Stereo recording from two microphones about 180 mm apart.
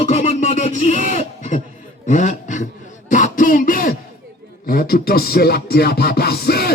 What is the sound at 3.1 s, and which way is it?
Speech, 45° left (ahead or behind).